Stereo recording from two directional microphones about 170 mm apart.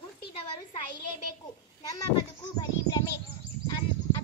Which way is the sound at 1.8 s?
20° left (ahead or behind).